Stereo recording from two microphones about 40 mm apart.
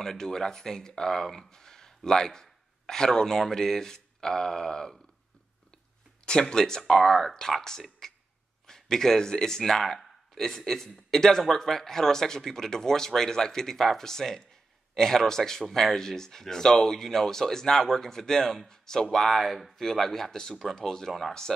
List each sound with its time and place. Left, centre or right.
0.0 s speech: centre
6.2 s speech: left
8.0 s a sound: centre
8.6 s speech: centre